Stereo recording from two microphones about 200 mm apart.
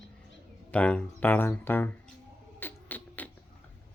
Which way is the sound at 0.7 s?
5° left (ahead or behind).